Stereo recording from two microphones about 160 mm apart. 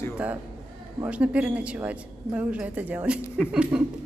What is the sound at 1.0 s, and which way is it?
A woman's voice, 10° right (ahead or behind).